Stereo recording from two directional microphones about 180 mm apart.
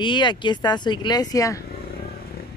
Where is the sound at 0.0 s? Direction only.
25° left (ahead or behind).